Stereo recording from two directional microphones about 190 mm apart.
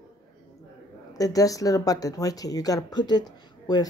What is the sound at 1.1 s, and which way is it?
Speech, 20° left (ahead or behind).